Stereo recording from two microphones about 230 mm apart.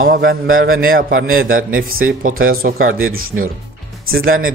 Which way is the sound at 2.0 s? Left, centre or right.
Right.